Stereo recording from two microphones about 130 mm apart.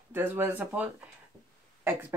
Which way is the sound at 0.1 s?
15° right (ahead or behind).